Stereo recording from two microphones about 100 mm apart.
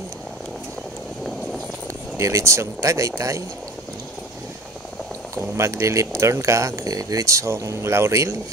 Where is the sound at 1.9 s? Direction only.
30° right (ahead or behind).